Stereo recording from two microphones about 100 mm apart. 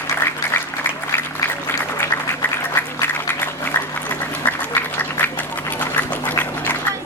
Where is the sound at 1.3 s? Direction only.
25° left (ahead or behind).